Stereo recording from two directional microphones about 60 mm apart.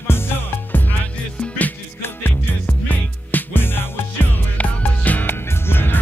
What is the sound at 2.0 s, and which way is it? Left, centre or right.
Music, left.